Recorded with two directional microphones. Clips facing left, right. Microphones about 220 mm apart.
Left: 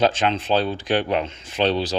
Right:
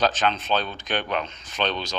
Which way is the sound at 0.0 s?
25° left (ahead or behind).